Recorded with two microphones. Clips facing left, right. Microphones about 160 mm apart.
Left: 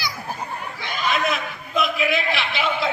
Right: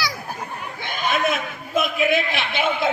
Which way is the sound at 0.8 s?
50° right (ahead or behind).